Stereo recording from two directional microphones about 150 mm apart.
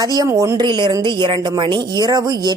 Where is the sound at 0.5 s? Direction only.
30° right (ahead or behind).